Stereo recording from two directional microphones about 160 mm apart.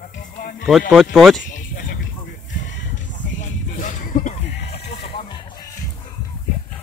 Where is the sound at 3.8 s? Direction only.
55° left (ahead or behind).